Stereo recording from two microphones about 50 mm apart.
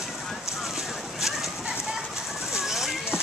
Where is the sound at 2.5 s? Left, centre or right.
Centre.